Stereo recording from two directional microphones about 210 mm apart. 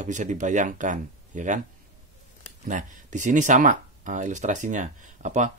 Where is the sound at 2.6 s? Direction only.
35° right (ahead or behind).